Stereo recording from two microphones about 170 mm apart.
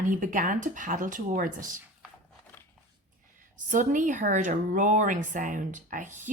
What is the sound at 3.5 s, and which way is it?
A woman's voice, 50° right (ahead or behind).